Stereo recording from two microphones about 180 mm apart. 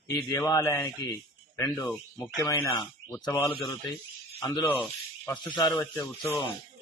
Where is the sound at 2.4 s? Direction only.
20° left (ahead or behind).